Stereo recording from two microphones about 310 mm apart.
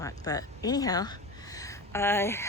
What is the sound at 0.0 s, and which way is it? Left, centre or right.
Speech, centre.